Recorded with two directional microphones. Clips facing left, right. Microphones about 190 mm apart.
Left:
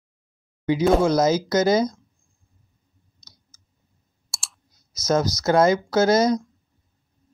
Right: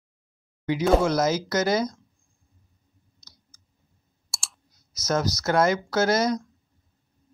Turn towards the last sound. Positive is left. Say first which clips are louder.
# left 4 dB
turn(degrees=20)  # may be behind; listen again after turning